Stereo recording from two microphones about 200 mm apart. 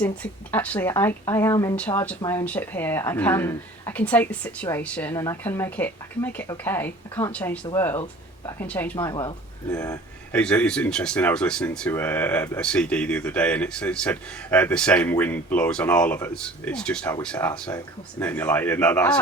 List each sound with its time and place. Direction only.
0.0 s a woman's voice: 5° left (ahead or behind)
9.0 s speech: 20° left (ahead or behind)
10.4 s a woman's voice: 5° left (ahead or behind)